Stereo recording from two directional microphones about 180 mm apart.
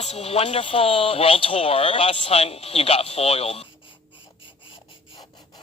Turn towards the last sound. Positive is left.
turn(degrees=25)  # may be behind; listen again after turning